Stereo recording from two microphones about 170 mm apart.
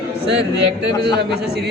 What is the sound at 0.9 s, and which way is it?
Speech, 25° left (ahead or behind).